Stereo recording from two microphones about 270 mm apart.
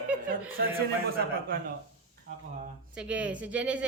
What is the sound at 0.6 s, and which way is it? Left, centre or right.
Speech, right.